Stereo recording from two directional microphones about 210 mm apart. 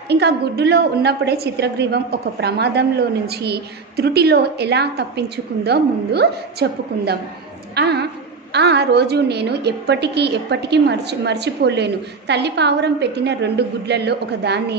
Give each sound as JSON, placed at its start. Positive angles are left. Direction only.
{"t": 0.1, "sound": "a woman's voice", "side_deg": -50}